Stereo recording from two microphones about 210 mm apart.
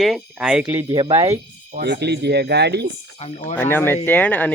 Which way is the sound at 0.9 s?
20° right (ahead or behind).